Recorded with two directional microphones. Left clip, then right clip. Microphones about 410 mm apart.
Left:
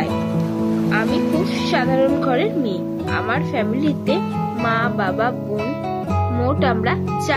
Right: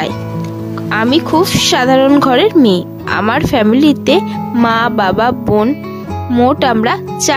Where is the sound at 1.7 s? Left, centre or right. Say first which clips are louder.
Right 7 dB; right.